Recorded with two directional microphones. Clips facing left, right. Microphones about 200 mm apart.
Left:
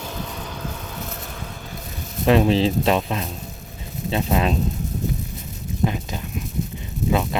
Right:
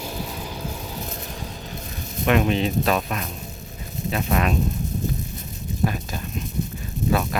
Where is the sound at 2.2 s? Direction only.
30° left (ahead or behind).